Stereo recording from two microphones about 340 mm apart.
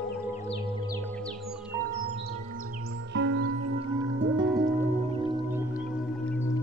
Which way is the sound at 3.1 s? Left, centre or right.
Right.